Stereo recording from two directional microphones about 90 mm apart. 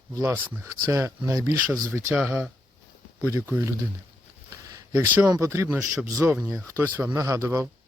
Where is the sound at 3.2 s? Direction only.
30° right (ahead or behind).